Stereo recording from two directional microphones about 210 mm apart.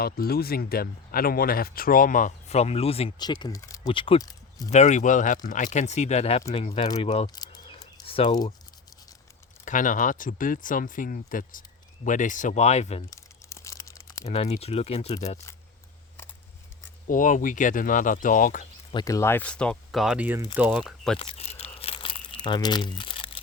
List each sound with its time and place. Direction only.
0.0 s speech: 45° left (ahead or behind); by 4.7 s 15° left (ahead or behind)
4.7 s speech: 35° left (ahead or behind)
7.3 s a sound: 20° left (ahead or behind)
9.6 s speech: 40° left (ahead or behind)
13.1 s crumpling: 15° left (ahead or behind)
14.3 s speech: 30° left (ahead or behind)
17.1 s speech: 40° left (ahead or behind)
18.9 s speech: 20° left (ahead or behind); by 21.2 s centre (ahead or behind)
21.2 s a sound: 30° left (ahead or behind)
21.8 s crumpling: 25° left (ahead or behind)